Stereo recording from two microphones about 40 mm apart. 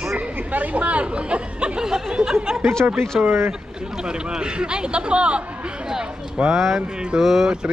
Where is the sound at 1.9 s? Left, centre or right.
Centre.